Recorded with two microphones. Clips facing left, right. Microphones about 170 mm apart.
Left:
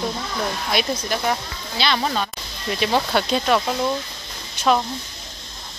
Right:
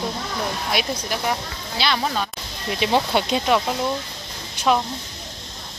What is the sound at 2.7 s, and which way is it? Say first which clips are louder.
Speech: right 1 dB; 20° right (ahead or behind).